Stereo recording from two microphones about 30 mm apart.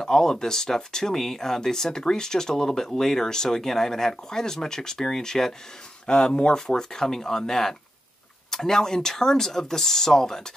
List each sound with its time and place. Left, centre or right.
0.0 s speech: centre
6.0 s speech: left